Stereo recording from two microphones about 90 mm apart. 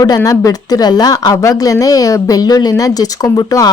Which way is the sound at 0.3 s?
45° left (ahead or behind).